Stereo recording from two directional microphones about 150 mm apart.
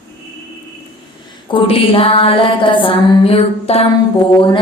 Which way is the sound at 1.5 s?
40° left (ahead or behind).